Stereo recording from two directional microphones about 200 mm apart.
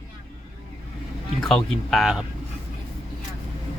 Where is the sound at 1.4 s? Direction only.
Centre (ahead or behind).